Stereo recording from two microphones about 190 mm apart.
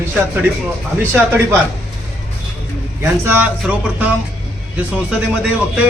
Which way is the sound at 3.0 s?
10° right (ahead or behind).